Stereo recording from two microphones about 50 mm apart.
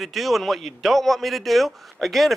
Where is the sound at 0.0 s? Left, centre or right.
Centre.